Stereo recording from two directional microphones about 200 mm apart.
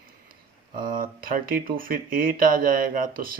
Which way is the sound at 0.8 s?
45° right (ahead or behind).